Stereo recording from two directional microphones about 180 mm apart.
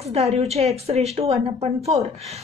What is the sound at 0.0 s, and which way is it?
A woman's voice, 35° right (ahead or behind).